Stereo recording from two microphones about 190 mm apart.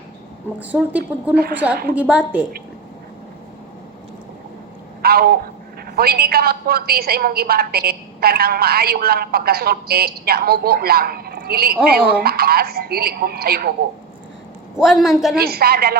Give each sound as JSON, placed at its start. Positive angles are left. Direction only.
{"t": 0.6, "sound": "a woman's voice", "side_deg": -10}
{"t": 5.0, "sound": "a woman's voice", "side_deg": -55}
{"t": 14.8, "sound": "a man's voice", "side_deg": 0}
{"t": 15.4, "sound": "a woman's voice", "side_deg": -55}